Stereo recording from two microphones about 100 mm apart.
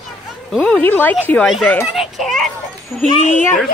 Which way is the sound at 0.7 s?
15° left (ahead or behind).